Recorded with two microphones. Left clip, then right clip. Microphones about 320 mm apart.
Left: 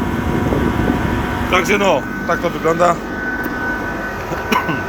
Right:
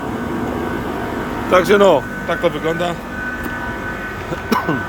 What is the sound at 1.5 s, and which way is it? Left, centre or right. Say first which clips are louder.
Speech: right 4 dB; centre.